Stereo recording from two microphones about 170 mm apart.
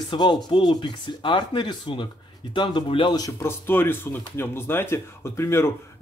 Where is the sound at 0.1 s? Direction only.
25° left (ahead or behind).